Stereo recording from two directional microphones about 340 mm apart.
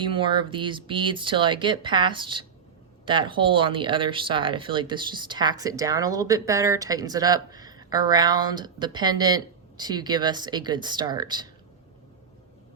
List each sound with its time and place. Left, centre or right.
0.0 s speech: centre